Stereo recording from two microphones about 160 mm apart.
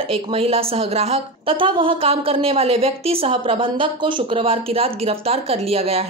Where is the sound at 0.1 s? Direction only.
35° right (ahead or behind).